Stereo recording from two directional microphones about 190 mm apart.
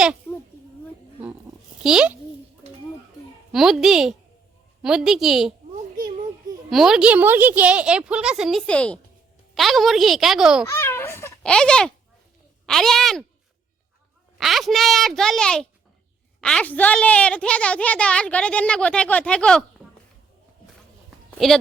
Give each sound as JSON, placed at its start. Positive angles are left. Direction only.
{"t": 1.8, "sound": "a woman's voice", "side_deg": -5}
{"t": 3.5, "sound": "a woman's voice", "side_deg": 0}
{"t": 6.7, "sound": "a woman's voice", "side_deg": 0}
{"t": 10.7, "sound": "a sound", "side_deg": 15}
{"t": 11.5, "sound": "a woman's voice", "side_deg": 5}
{"t": 14.3, "sound": "a woman's voice", "side_deg": 0}
{"t": 21.2, "sound": "a sound", "side_deg": 0}